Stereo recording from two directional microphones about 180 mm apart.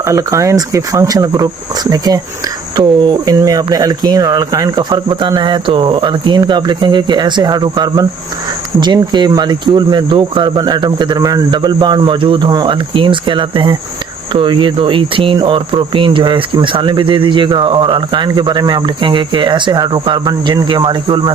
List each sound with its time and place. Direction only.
0.0 s speech: 15° right (ahead or behind)